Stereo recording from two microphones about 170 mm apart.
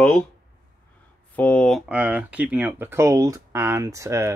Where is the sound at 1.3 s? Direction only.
5° left (ahead or behind).